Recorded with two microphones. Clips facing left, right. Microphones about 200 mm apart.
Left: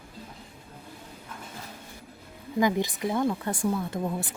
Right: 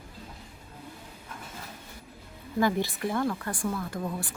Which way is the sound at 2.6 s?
15° left (ahead or behind).